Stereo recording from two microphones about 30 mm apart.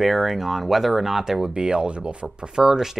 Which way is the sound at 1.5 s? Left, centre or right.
Right.